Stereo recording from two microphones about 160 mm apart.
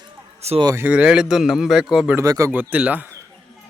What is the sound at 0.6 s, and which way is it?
A man's voice, 15° right (ahead or behind).